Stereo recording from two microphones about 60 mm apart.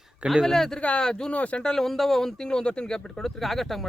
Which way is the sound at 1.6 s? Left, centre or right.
Centre.